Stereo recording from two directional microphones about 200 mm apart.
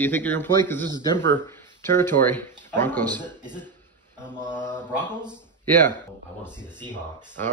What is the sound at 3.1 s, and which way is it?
Speech, 20° right (ahead or behind).